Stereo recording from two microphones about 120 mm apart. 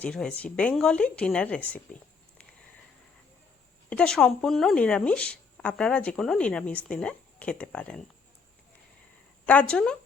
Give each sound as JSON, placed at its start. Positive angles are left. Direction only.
{"t": 0.0, "sound": "speech", "side_deg": 5}
{"t": 3.8, "sound": "speech", "side_deg": 10}
{"t": 9.5, "sound": "speech", "side_deg": 10}